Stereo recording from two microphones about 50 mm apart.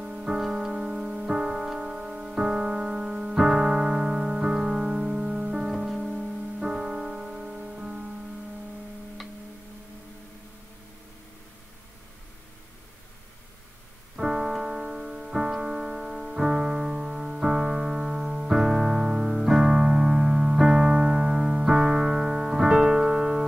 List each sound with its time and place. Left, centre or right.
0.0 s music: centre
14.1 s piano: centre